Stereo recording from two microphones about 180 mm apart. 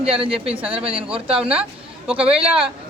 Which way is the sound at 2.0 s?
5° right (ahead or behind).